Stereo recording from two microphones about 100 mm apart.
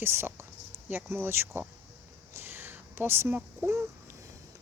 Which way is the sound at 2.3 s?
25° right (ahead or behind).